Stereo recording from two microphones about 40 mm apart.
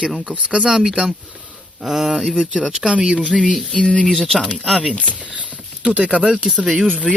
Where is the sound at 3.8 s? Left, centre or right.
Left.